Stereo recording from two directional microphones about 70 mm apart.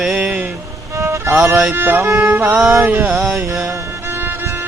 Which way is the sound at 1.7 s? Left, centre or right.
Right.